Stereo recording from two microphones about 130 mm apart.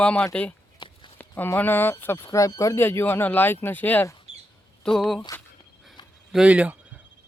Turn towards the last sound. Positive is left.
turn(degrees=-10)  # may be behind; listen again after turning